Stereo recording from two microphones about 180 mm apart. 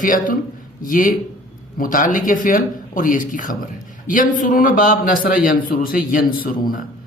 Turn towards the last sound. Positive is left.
turn(degrees=50)  # may be behind; listen again after turning